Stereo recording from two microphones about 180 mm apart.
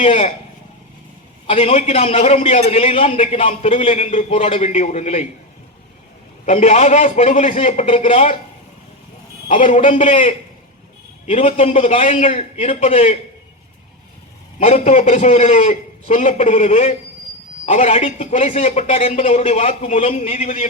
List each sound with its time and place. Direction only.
0.0 s a man's voice: 35° left (ahead or behind)
1.5 s a man's voice: 35° left (ahead or behind)
6.4 s a man's voice: 40° left (ahead or behind)
9.5 s a man's voice: 35° left (ahead or behind)
14.6 s a man's voice: 35° left (ahead or behind)